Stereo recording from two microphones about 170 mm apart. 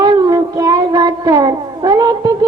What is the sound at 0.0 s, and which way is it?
Child singing, 20° right (ahead or behind).